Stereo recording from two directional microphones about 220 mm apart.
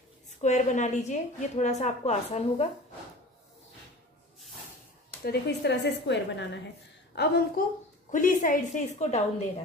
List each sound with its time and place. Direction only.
0.4 s a woman's voice: 35° left (ahead or behind)
5.2 s a woman's voice: 50° left (ahead or behind); by 9.2 s 30° left (ahead or behind)